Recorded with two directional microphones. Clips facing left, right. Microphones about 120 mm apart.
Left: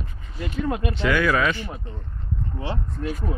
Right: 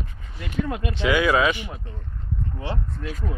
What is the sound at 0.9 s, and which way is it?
Speech, 20° right (ahead or behind).